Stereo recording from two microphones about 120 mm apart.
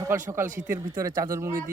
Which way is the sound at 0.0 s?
25° right (ahead or behind).